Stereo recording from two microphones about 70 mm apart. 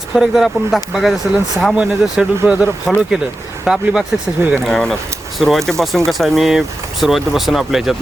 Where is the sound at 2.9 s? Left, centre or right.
Centre.